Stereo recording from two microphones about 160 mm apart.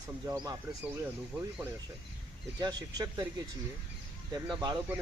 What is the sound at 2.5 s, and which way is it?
Speech, 25° right (ahead or behind).